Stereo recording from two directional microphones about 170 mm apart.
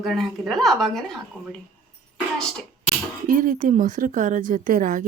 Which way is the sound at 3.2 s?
50° right (ahead or behind).